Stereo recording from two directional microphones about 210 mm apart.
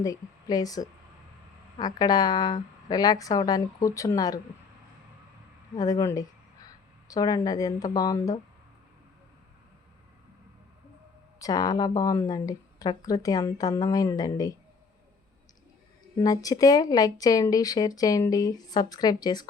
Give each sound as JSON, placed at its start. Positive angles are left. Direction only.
{"t": 0.0, "sound": "speech", "side_deg": 15}
{"t": 5.7, "sound": "speech", "side_deg": 15}
{"t": 11.3, "sound": "speech", "side_deg": 15}
{"t": 16.1, "sound": "speech", "side_deg": 15}